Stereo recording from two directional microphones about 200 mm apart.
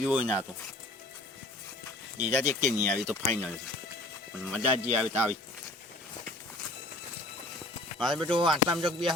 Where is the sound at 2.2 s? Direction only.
35° right (ahead or behind).